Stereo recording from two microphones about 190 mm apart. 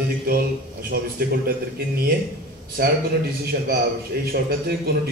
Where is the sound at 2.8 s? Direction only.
55° right (ahead or behind).